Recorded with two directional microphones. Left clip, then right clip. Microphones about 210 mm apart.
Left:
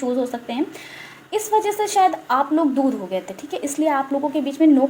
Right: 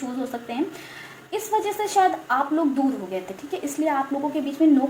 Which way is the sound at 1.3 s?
35° left (ahead or behind).